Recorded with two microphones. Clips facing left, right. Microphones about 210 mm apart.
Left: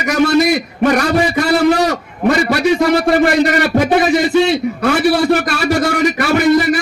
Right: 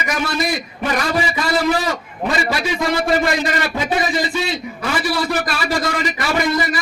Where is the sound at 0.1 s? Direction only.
60° left (ahead or behind).